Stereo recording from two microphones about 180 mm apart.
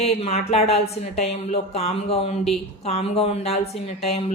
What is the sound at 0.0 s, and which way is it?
Speech, 35° left (ahead or behind).